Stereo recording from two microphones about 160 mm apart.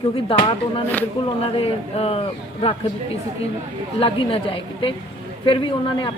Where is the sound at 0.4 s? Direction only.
35° left (ahead or behind).